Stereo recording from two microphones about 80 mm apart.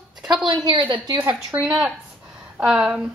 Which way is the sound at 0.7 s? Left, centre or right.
Right.